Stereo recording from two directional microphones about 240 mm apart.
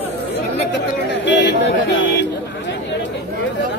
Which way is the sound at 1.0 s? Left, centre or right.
Left.